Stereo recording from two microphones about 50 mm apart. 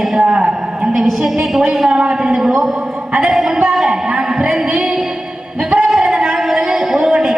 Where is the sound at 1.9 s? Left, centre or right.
Centre.